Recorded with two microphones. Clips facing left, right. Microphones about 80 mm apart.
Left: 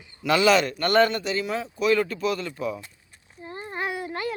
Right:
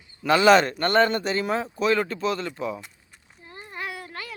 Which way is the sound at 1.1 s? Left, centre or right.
Right.